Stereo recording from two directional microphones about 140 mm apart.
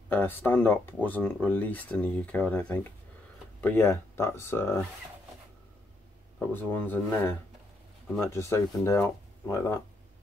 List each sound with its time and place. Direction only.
0.1 s speech: 15° left (ahead or behind)
6.5 s speech: 15° left (ahead or behind)